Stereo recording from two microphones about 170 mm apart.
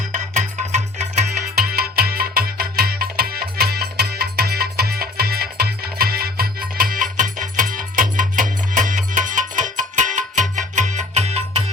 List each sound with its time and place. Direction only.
1.6 s music: 65° right (ahead or behind); by 11.6 s 40° right (ahead or behind)